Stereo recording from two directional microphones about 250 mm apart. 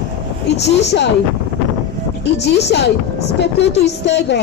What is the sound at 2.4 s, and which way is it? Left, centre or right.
Speech, left.